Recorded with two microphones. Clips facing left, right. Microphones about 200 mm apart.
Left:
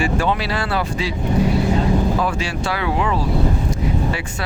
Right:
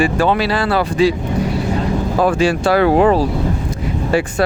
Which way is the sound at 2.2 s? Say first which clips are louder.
Right 8 dB; 50° right (ahead or behind).